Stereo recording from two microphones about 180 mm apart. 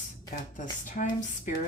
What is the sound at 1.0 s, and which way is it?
Speech, 45° left (ahead or behind).